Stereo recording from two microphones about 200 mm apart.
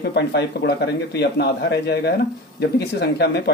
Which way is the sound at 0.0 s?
55° left (ahead or behind).